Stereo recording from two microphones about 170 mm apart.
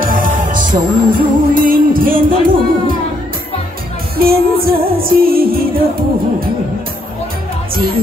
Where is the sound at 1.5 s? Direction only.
55° right (ahead or behind).